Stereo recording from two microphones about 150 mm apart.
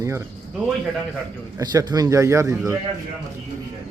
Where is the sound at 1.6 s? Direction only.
25° right (ahead or behind).